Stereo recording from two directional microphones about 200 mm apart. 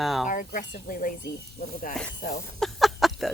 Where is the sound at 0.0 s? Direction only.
Centre (ahead or behind).